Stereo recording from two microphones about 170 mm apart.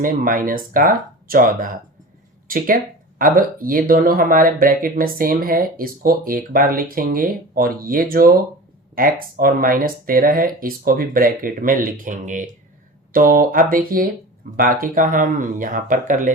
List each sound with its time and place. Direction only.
0.0 s speech: 55° right (ahead or behind)